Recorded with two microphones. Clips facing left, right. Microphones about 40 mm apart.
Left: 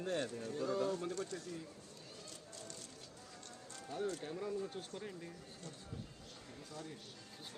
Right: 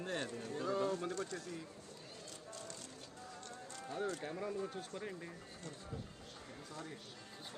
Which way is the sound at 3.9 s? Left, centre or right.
Right.